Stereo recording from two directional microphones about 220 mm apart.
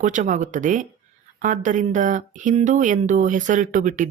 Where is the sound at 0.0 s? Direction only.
35° right (ahead or behind).